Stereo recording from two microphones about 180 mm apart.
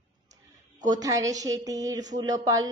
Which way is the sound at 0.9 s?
20° right (ahead or behind).